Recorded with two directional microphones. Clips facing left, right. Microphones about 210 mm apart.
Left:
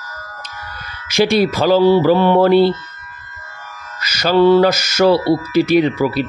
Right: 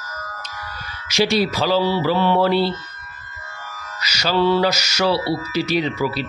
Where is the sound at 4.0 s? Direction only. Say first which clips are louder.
Left 7 dB; 50° left (ahead or behind).